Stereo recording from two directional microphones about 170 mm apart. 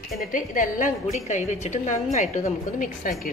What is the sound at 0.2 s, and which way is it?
A woman's voice, 50° left (ahead or behind).